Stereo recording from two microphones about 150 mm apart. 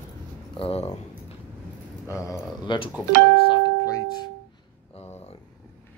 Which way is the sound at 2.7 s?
30° left (ahead or behind).